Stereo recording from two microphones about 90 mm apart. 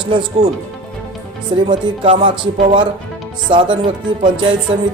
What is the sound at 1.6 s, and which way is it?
Speech, 65° right (ahead or behind).